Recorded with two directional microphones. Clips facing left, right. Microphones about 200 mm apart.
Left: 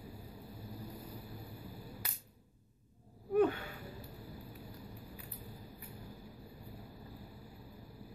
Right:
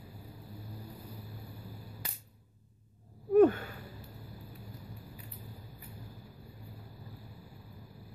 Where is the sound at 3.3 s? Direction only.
45° right (ahead or behind).